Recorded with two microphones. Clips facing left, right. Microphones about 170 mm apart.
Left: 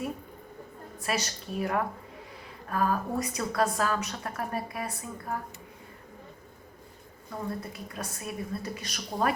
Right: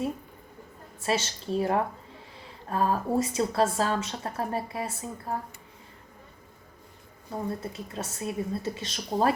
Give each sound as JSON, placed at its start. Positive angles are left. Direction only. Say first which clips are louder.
{"t": 0.9, "sound": "a woman's voice", "louder": "right 4 dB", "side_deg": -25}
{"t": 7.3, "sound": "a woman's voice", "louder": "right 3 dB", "side_deg": -25}